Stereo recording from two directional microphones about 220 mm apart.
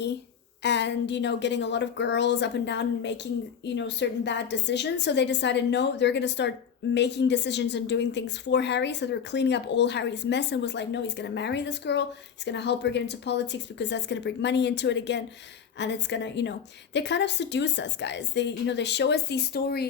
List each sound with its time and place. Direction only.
0.6 s a woman's voice: 50° left (ahead or behind)